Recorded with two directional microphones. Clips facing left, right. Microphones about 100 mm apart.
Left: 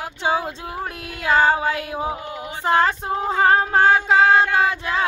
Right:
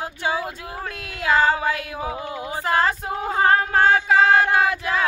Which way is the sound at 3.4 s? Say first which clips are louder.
Left 1 dB; 25° left (ahead or behind).